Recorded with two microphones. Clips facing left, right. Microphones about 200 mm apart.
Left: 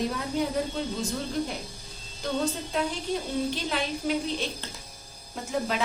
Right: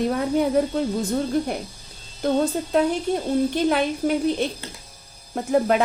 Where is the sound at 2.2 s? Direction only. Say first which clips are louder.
Right 8 dB; 55° right (ahead or behind).